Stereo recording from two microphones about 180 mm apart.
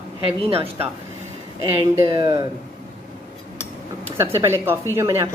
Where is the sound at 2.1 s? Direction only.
25° right (ahead or behind).